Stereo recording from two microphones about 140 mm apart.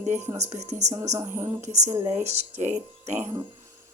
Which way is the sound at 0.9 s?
25° right (ahead or behind).